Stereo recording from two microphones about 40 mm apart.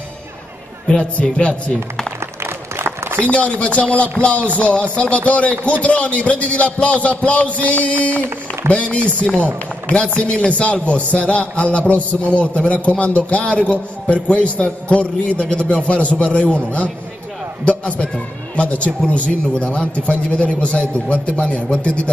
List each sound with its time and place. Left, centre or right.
1.2 s speech: left
2.4 s run: right
3.3 s a man's voice: left